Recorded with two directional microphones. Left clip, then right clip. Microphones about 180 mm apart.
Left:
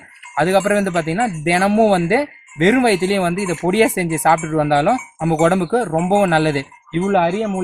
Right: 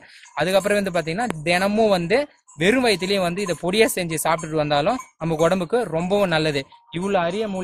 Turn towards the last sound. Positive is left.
turn(degrees=-35)  # may be behind; listen again after turning